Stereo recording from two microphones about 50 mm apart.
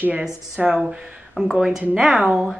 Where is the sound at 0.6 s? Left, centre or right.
Right.